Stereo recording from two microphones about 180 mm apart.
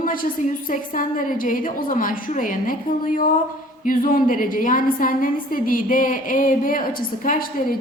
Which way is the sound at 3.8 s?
50° left (ahead or behind).